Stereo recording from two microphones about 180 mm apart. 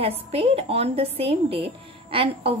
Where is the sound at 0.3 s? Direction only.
30° right (ahead or behind).